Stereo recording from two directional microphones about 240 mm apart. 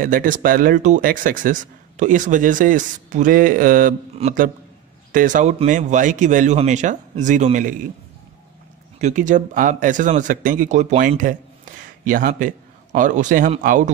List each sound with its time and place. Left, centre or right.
0.0 s speech: right
9.0 s speech: right